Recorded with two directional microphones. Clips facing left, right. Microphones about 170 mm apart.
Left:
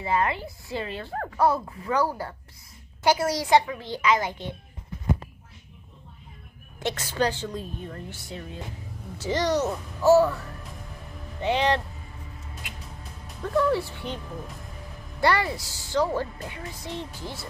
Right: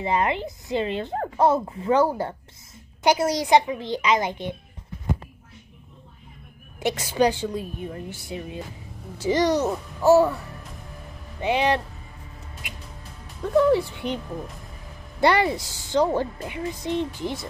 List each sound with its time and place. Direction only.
0.0 s a woman's voice: 20° right (ahead or behind)
6.8 s a woman's voice: 10° right (ahead or behind)
11.4 s a woman's voice: 10° right (ahead or behind)
12.6 s music: 15° right (ahead or behind)
13.6 s a woman's voice: 15° right (ahead or behind)
15.1 s a woman's voice: 20° right (ahead or behind)